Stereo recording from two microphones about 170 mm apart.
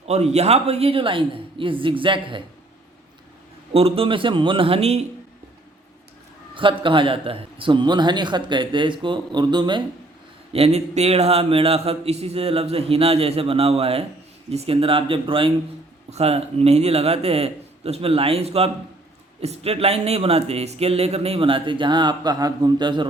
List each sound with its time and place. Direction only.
0.0 s speech: 40° right (ahead or behind)
3.7 s speech: 35° right (ahead or behind)
6.5 s a man's voice: 30° right (ahead or behind)
10.5 s speech: 35° right (ahead or behind)